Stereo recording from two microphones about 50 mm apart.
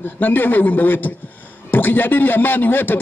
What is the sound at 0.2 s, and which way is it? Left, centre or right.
A man's voice, left.